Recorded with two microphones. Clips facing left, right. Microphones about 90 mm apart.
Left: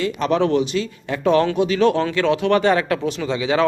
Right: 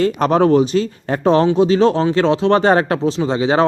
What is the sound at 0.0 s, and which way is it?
Speech, 40° right (ahead or behind).